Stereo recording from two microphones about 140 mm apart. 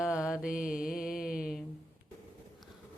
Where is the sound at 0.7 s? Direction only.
5° right (ahead or behind).